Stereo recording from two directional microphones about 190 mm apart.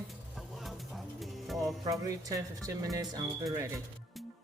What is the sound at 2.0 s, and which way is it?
Speech, 20° right (ahead or behind).